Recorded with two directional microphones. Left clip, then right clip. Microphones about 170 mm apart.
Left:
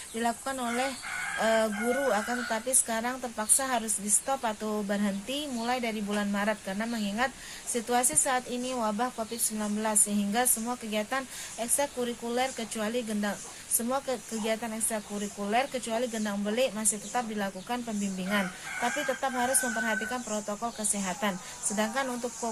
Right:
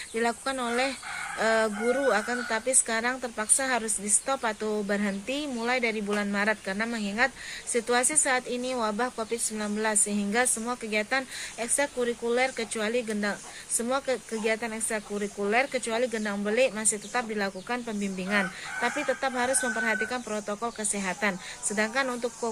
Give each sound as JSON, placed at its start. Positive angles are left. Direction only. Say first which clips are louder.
{"t": 0.2, "sound": "speech", "louder": "right 3 dB", "side_deg": -15}